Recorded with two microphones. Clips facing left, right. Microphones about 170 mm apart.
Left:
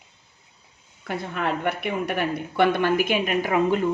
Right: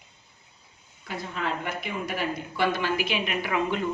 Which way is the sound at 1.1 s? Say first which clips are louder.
Left 5 dB; 60° left (ahead or behind).